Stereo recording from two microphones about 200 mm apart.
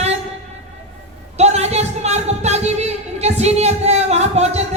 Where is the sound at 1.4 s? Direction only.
35° right (ahead or behind).